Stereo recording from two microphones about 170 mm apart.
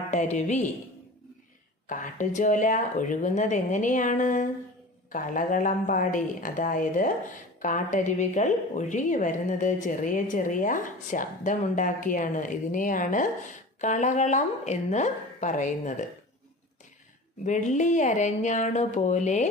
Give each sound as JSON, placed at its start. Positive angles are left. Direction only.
{"t": 0.1, "sound": "a woman's voice", "side_deg": 45}
{"t": 1.9, "sound": "a woman's voice", "side_deg": 50}
{"t": 17.5, "sound": "a woman's voice", "side_deg": 45}